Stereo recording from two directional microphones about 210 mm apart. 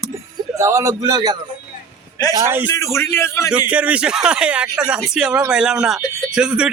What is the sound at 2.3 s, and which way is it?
Speech, 10° right (ahead or behind).